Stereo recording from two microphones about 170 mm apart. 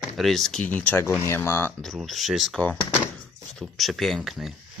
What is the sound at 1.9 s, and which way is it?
Speech, centre (ahead or behind).